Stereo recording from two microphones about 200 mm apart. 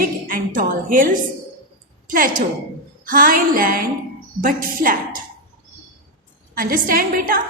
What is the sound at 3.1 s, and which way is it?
A woman's voice, 45° right (ahead or behind).